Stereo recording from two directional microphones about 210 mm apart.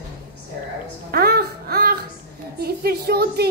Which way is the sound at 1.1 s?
50° right (ahead or behind).